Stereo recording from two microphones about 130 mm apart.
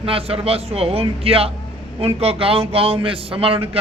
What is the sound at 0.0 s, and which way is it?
A man's voice, 45° right (ahead or behind).